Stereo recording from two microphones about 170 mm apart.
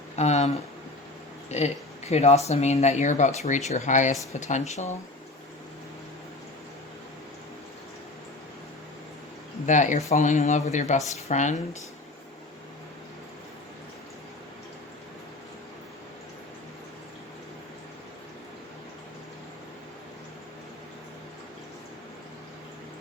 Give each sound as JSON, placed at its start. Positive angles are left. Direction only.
{"t": 0.2, "sound": "speech", "side_deg": 40}
{"t": 9.6, "sound": "speech", "side_deg": 45}